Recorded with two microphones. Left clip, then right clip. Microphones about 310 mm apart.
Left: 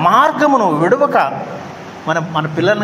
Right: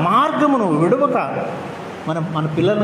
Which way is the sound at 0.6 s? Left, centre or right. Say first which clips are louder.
Left 3 dB; left.